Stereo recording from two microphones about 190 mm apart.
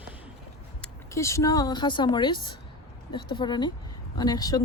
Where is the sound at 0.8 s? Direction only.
15° left (ahead or behind).